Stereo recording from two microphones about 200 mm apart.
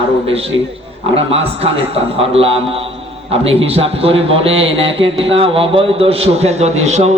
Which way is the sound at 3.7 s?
30° right (ahead or behind).